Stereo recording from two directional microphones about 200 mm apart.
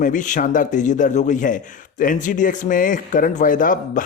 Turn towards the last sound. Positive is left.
turn(degrees=40)  # may be behind; listen again after turning